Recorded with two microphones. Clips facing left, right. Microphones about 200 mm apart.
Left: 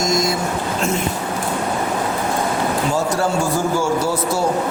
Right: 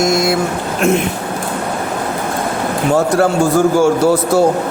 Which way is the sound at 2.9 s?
60° right (ahead or behind).